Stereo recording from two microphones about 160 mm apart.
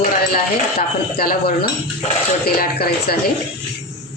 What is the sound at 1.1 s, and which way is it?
Speech, 65° left (ahead or behind).